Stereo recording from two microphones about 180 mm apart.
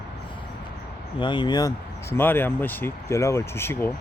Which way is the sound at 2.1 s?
10° left (ahead or behind).